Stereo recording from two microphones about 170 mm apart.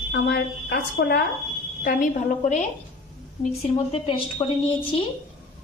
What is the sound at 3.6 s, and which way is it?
Speech, 35° left (ahead or behind).